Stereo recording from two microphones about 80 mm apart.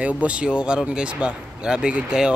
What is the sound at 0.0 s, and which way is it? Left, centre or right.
Speech, centre.